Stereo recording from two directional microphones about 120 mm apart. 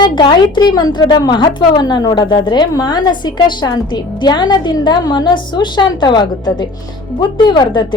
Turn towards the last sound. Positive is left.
turn(degrees=40)  # may be behind; listen again after turning